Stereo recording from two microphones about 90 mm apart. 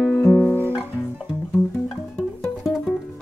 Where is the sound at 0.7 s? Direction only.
5° right (ahead or behind).